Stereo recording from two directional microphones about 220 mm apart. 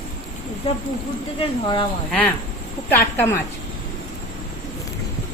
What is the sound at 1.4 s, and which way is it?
Speech, 25° left (ahead or behind).